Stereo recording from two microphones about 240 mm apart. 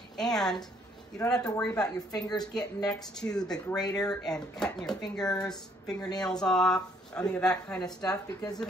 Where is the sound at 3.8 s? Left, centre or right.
Centre.